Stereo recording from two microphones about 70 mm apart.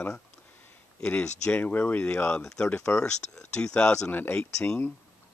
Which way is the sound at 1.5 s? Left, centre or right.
Left.